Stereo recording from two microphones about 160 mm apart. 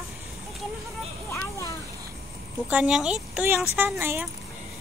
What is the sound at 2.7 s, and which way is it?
Speech, 5° right (ahead or behind).